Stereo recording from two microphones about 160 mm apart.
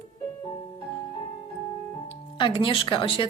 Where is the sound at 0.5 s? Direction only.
35° left (ahead or behind).